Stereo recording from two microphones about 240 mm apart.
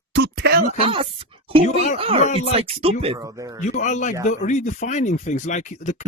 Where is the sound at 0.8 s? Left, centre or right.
Right.